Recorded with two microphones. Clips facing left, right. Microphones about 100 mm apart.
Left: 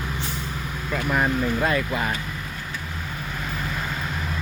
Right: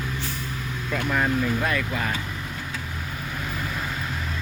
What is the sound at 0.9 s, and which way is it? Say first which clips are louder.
Speech: left 1 dB; 10° left (ahead or behind).